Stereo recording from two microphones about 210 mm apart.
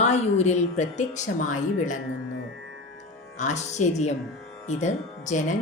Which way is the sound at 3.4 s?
35° left (ahead or behind).